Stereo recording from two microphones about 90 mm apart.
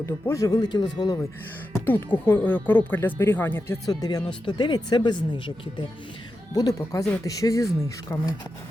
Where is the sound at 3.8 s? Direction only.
45° left (ahead or behind).